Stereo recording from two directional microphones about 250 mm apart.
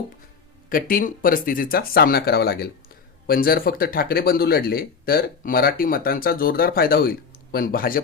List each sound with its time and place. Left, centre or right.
0.7 s speech: left